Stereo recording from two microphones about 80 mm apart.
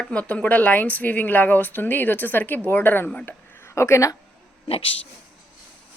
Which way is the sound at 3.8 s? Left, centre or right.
Left.